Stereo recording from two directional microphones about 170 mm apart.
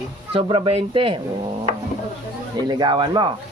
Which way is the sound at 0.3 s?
30° right (ahead or behind).